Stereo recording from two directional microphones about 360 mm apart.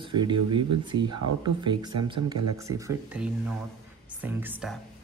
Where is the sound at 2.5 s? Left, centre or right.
Centre.